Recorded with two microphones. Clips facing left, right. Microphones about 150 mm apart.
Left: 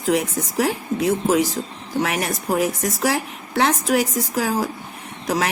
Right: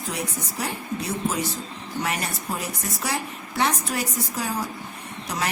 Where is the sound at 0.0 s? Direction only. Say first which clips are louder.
Left 10 dB; 90° left.